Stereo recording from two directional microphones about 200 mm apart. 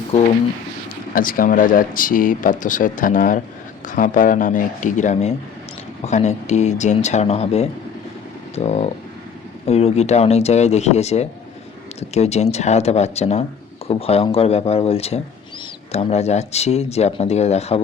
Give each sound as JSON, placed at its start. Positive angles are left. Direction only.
{"t": 0.1, "sound": "speech", "side_deg": 35}
{"t": 1.1, "sound": "speech", "side_deg": 45}